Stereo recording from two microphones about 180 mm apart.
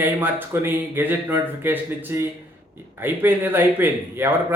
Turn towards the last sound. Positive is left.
turn(degrees=-10)  # may be behind; listen again after turning